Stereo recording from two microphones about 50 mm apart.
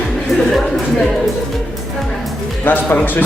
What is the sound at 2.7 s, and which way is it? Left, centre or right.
Speech, left.